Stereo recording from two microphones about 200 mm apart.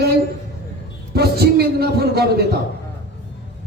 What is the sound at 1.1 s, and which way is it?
Speech, 55° right (ahead or behind).